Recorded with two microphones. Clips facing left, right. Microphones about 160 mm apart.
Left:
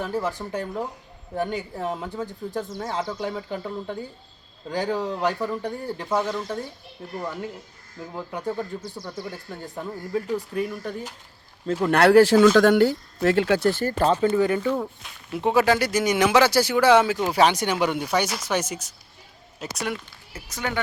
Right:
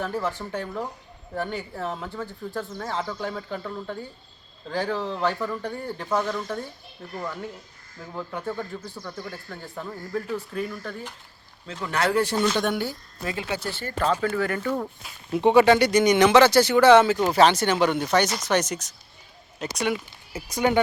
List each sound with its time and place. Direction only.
0.0 s speech: 10° left (ahead or behind)
8.1 s speech: 15° left (ahead or behind)
11.6 s speech: 45° left (ahead or behind)
14.0 s speech: 25° left (ahead or behind)
14.7 s speech: centre (ahead or behind)
20.3 s speech: 15° right (ahead or behind)